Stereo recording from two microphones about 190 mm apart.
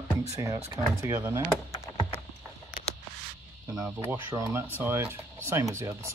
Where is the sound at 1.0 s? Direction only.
15° right (ahead or behind).